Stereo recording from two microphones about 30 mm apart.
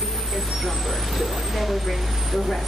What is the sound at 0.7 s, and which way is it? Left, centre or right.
Speech, centre.